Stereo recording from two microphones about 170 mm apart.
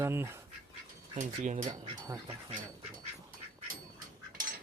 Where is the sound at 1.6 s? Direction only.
20° right (ahead or behind).